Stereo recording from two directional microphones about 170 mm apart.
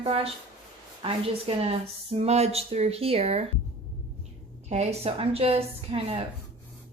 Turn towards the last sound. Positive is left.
turn(degrees=-35)  # may be behind; listen again after turning